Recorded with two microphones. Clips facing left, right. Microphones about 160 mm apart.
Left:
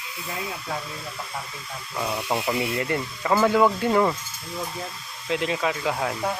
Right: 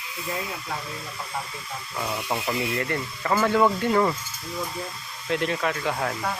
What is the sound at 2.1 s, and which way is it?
Speech, 15° left (ahead or behind).